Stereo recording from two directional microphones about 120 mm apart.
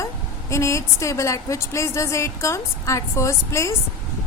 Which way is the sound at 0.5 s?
25° left (ahead or behind).